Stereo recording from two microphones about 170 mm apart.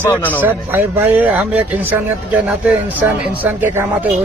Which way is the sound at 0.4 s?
10° right (ahead or behind).